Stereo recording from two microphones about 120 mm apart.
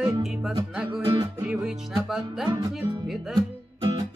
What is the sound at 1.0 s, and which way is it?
Music, 40° right (ahead or behind).